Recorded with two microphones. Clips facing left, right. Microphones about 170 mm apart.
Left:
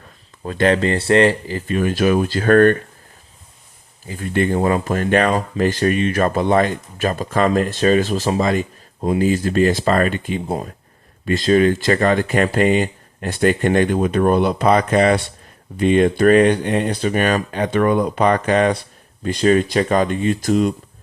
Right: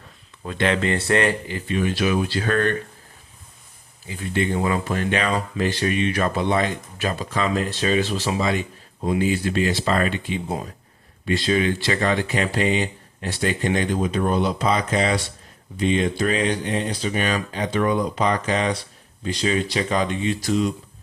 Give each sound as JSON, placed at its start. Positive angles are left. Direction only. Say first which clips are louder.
{"t": 0.4, "sound": "speech", "louder": "left 5 dB", "side_deg": 40}
{"t": 4.0, "sound": "speech", "louder": "left 4 dB", "side_deg": 45}